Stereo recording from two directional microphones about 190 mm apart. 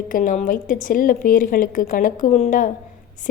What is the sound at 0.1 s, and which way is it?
A woman's voice, 45° left (ahead or behind).